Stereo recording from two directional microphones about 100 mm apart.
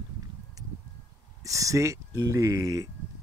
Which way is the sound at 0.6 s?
35° right (ahead or behind).